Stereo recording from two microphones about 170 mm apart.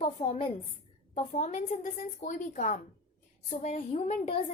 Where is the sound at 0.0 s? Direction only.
35° left (ahead or behind).